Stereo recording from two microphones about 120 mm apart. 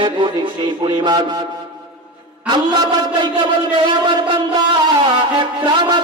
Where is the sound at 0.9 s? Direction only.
35° right (ahead or behind).